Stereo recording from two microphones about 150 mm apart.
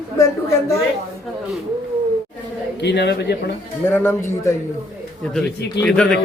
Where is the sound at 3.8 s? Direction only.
15° left (ahead or behind).